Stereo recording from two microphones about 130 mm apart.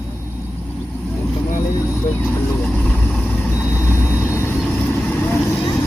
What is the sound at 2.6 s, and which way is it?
Vehicle, 10° left (ahead or behind).